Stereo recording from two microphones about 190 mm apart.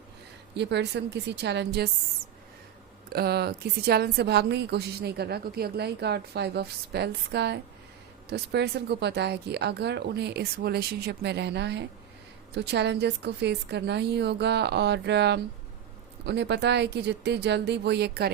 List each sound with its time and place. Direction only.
0.5 s a woman's voice: 65° right (ahead or behind)
3.1 s a woman's voice: 55° right (ahead or behind)